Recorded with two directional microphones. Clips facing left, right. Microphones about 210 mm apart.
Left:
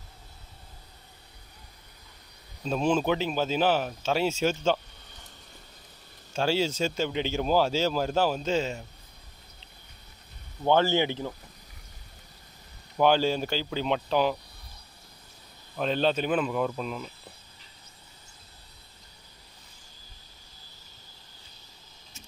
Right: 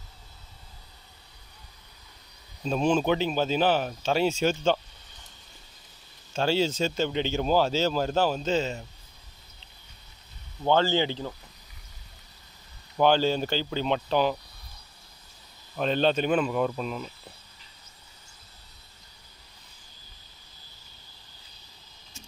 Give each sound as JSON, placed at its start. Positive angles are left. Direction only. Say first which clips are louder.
{"t": 2.6, "sound": "speech", "louder": "right 1 dB", "side_deg": 5}
{"t": 6.3, "sound": "speech", "louder": "right 1 dB", "side_deg": 5}
{"t": 10.6, "sound": "speech", "louder": "even", "side_deg": 15}
{"t": 12.9, "sound": "speech", "louder": "right 1 dB", "side_deg": 5}
{"t": 15.8, "sound": "speech", "louder": "right 2 dB", "side_deg": 5}